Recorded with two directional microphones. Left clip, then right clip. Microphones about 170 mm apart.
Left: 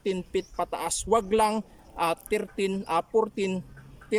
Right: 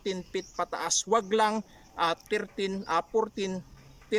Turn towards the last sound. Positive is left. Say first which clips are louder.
# left 3 dB
turn(degrees=15)  # may be behind; listen again after turning